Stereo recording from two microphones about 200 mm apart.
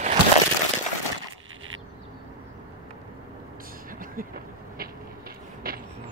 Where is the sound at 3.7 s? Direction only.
45° right (ahead or behind).